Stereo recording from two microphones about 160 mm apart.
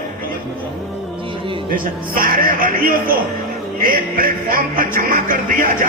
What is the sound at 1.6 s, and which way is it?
Music, 60° right (ahead or behind).